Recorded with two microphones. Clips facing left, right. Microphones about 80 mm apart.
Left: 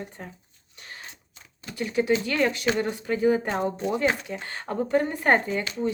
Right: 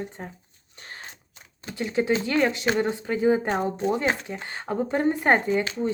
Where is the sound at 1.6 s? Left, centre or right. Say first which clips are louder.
Even; right.